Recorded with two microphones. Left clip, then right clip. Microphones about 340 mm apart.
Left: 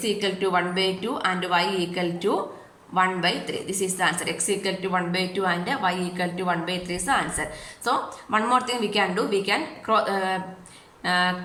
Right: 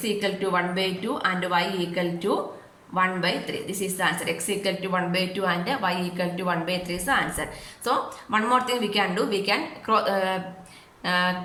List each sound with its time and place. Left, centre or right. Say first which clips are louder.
0.0 s a woman's voice: left 1 dB; centre